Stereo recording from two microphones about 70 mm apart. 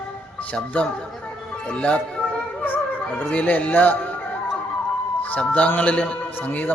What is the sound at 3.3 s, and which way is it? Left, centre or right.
Speech, centre.